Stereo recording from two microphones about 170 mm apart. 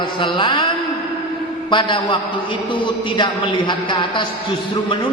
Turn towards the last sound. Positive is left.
turn(degrees=30)  # may be behind; listen again after turning